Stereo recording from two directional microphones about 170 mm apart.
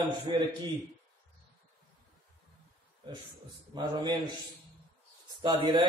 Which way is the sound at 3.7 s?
25° right (ahead or behind).